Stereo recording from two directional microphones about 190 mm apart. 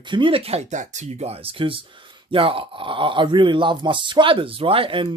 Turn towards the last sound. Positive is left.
turn(degrees=-30)  # may be behind; listen again after turning